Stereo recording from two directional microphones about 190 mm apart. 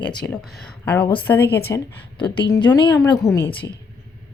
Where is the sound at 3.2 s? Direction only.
15° left (ahead or behind).